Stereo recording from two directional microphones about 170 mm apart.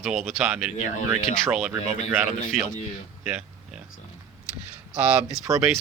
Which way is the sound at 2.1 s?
5° right (ahead or behind).